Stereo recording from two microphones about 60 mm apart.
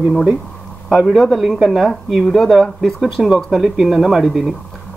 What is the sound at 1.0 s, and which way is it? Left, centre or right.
Speech, centre.